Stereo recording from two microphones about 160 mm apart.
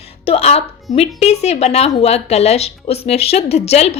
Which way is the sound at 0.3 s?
40° left (ahead or behind).